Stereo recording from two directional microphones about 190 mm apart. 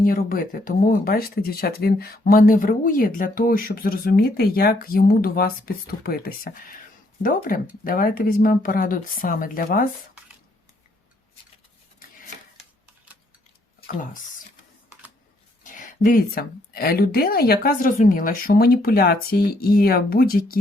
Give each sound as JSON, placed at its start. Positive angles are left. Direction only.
{"t": 0.0, "sound": "speech", "side_deg": 45}
{"t": 13.8, "sound": "speech", "side_deg": 45}
{"t": 15.6, "sound": "speech", "side_deg": 45}